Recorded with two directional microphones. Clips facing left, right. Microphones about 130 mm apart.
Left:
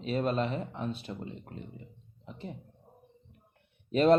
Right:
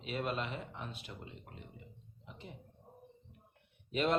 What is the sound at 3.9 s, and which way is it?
Speech, 40° left (ahead or behind).